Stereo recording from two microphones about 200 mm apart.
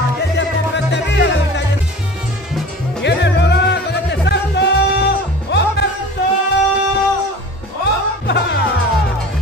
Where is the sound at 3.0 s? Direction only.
60° left (ahead or behind).